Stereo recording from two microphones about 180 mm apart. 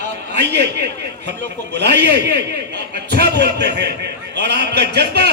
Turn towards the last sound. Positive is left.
turn(degrees=-65)  # may be behind; listen again after turning